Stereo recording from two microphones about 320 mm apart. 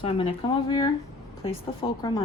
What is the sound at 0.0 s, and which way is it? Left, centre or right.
Speech, centre.